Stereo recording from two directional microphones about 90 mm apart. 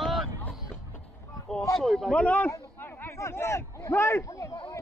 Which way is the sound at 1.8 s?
5° left (ahead or behind).